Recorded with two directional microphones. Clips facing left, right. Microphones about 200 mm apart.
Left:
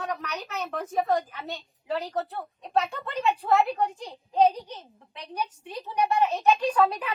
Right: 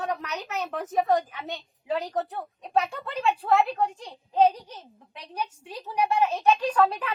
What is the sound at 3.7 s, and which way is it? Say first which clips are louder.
Speech: even; 5° left (ahead or behind).